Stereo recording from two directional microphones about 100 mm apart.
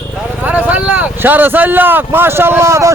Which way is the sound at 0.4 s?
15° right (ahead or behind).